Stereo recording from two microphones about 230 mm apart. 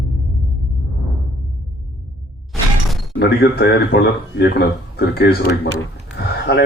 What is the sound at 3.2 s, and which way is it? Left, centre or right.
Speech, left.